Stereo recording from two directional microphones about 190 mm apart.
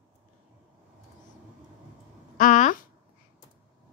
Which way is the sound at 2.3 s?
40° left (ahead or behind).